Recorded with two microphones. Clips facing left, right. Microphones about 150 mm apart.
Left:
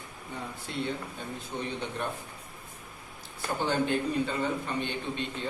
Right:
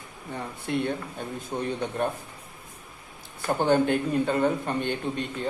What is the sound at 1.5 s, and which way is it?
Speech, 50° right (ahead or behind).